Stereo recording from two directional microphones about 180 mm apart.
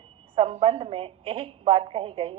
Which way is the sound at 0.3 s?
30° right (ahead or behind).